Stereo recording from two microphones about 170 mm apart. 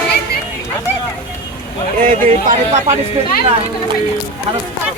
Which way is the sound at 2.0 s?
45° right (ahead or behind).